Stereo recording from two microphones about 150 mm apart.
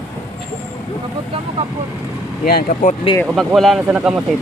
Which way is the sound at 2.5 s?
75° left (ahead or behind).